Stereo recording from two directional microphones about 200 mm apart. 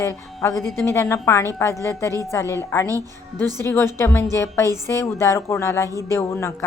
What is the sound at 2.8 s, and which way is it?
Speech, 15° right (ahead or behind).